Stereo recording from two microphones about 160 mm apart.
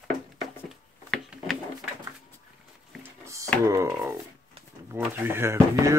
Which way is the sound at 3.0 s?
20° right (ahead or behind).